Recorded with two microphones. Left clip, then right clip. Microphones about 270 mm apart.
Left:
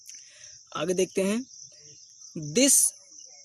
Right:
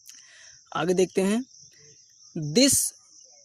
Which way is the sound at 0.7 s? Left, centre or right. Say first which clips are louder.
Right 3 dB; centre.